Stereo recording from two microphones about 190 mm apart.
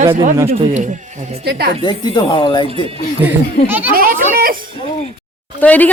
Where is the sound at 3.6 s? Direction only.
10° right (ahead or behind).